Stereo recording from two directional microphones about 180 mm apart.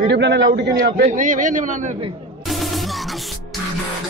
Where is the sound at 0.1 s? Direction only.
70° right (ahead or behind); by 2.0 s 45° right (ahead or behind).